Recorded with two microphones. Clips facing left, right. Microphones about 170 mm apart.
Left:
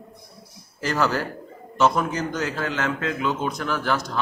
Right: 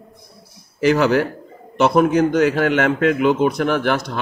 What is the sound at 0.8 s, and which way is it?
Speech, 65° right (ahead or behind).